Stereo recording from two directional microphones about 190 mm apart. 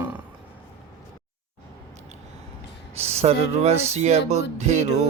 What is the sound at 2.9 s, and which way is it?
Speech, 35° right (ahead or behind).